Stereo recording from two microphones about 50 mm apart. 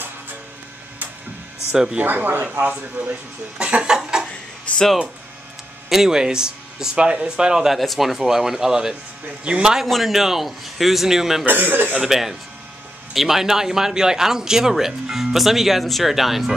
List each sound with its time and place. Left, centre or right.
2.0 s speech: right
3.5 s a sound: right
4.7 s speech: left
5.9 s a man's voice: centre
9.8 s a man's voice: centre
11.4 s speech: right
12.0 s a man's voice: centre